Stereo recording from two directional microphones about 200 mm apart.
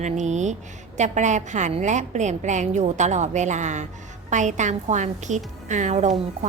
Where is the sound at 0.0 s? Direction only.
35° right (ahead or behind).